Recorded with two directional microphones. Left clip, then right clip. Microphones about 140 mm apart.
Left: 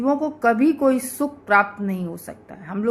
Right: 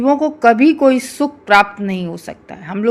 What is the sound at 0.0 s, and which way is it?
A woman's voice, 50° right (ahead or behind).